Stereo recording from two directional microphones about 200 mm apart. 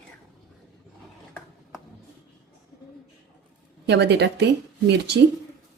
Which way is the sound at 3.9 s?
60° right (ahead or behind).